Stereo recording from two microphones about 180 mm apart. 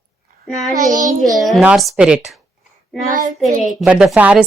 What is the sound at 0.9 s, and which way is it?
Child singing, 45° right (ahead or behind).